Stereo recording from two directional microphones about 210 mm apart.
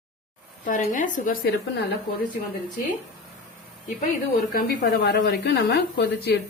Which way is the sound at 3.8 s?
45° left (ahead or behind).